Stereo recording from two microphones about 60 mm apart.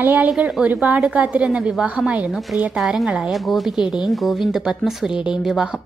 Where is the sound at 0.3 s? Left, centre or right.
Centre.